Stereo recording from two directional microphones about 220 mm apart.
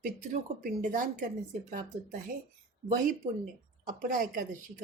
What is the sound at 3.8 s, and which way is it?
Speech, 40° right (ahead or behind).